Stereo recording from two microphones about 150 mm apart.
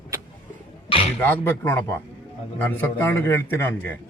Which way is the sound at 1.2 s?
15° left (ahead or behind).